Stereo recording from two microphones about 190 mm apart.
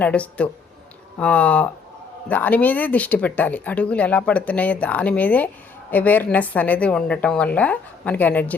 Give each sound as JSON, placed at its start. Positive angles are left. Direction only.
{"t": 0.0, "sound": "speech", "side_deg": 5}